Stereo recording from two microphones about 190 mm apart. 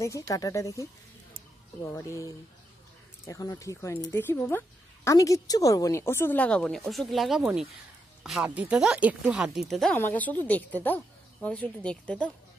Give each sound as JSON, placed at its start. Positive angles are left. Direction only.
{"t": 0.3, "sound": "speech", "side_deg": 15}